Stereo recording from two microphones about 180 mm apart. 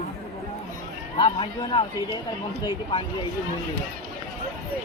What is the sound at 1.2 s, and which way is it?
Speech, 30° left (ahead or behind).